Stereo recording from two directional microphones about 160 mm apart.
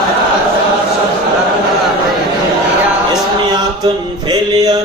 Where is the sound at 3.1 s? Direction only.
25° right (ahead or behind).